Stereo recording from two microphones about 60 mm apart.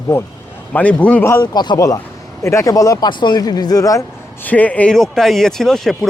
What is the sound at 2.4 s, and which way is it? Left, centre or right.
Speech, left.